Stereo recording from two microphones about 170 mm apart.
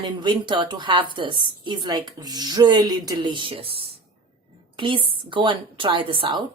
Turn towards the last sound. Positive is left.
turn(degrees=-25)  # may be behind; listen again after turning